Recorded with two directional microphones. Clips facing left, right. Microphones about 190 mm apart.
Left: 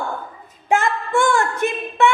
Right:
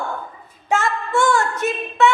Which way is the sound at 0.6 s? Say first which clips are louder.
Left 2 dB; 55° left (ahead or behind).